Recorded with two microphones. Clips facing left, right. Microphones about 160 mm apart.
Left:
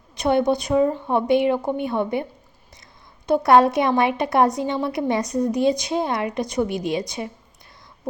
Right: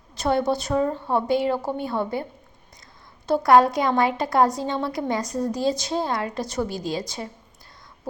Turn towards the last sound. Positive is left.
turn(degrees=20)  # may be behind; listen again after turning